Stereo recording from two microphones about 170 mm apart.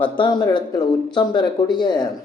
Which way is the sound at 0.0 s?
25° left (ahead or behind).